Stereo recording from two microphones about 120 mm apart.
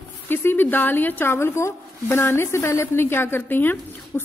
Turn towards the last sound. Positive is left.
turn(degrees=15)  # may be behind; listen again after turning